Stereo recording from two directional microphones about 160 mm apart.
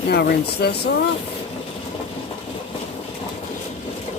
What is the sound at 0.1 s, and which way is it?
Speech, 90° left.